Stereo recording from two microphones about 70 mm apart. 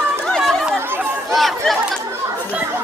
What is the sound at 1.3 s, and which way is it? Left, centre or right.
Chatter, centre.